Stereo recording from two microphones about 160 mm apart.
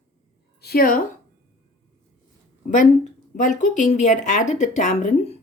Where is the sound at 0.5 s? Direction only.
75° left (ahead or behind).